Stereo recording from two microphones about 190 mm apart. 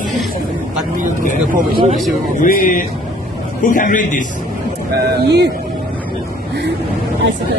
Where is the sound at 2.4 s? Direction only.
45° left (ahead or behind).